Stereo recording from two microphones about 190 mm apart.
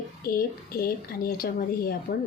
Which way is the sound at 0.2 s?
50° left (ahead or behind).